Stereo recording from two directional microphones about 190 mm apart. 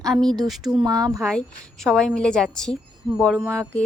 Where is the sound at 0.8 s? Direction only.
20° right (ahead or behind).